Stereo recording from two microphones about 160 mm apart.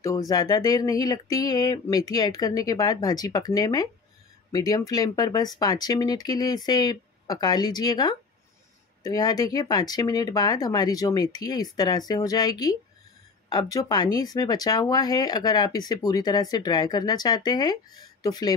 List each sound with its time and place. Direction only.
0.0 s speech: 20° left (ahead or behind)